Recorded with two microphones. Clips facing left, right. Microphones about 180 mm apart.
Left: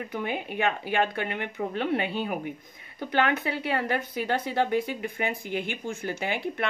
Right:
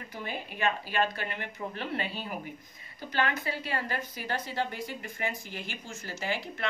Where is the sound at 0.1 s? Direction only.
60° left (ahead or behind).